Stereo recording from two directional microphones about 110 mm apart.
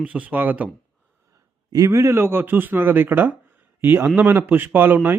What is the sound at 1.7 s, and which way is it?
A man's voice, 30° right (ahead or behind).